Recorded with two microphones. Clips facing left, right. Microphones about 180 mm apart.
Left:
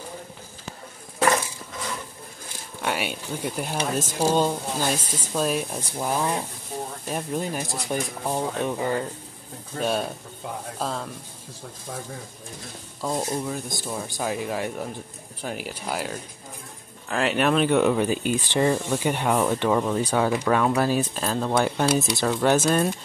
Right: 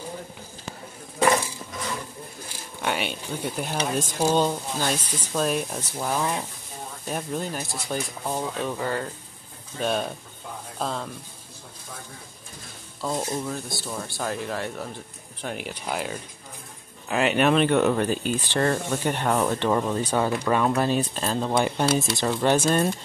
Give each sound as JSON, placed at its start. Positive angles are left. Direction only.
{"t": 2.8, "sound": "speech", "side_deg": 5}
{"t": 7.6, "sound": "speech", "side_deg": 20}
{"t": 13.0, "sound": "speech", "side_deg": 15}